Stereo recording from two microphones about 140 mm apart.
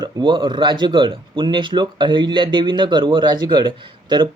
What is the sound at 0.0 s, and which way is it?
Speech, 35° right (ahead or behind).